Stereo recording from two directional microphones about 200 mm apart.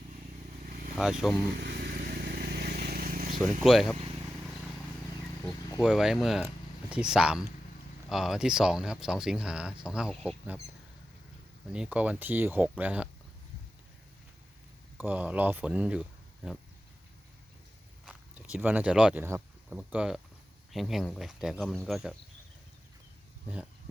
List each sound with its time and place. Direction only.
0.9 s speech: centre (ahead or behind)
1.5 s vehicle: 50° right (ahead or behind)
3.3 s speech: centre (ahead or behind)
5.8 s speech: 5° right (ahead or behind)
11.7 s speech: 5° right (ahead or behind)
14.9 s speech: 10° right (ahead or behind)
18.0 s speech: 5° right (ahead or behind)